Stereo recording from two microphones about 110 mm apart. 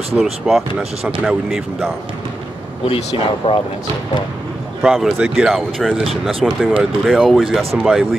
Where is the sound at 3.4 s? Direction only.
60° left (ahead or behind).